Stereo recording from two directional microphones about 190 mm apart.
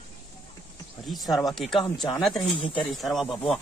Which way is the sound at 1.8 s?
20° left (ahead or behind).